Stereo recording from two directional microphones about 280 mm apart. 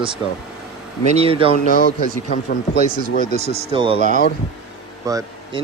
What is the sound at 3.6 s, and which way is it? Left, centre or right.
Speech, centre.